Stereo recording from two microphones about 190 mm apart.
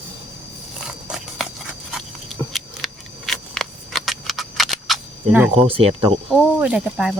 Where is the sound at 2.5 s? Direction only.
Centre (ahead or behind).